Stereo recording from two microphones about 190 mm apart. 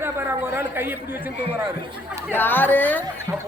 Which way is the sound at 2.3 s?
10° left (ahead or behind).